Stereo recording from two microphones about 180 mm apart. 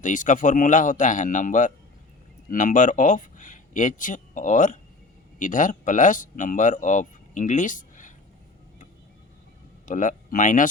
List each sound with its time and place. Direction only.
0.0 s speech: 45° left (ahead or behind)
9.8 s speech: 45° left (ahead or behind)